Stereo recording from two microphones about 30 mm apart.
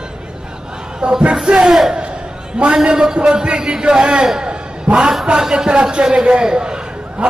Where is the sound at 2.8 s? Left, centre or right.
Right.